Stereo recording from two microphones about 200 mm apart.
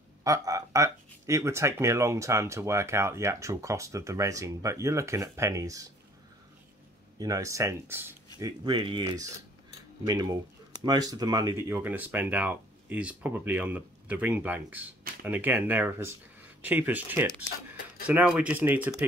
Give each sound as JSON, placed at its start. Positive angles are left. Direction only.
{"t": 0.2, "sound": "speech", "side_deg": -15}
{"t": 7.2, "sound": "speech", "side_deg": -15}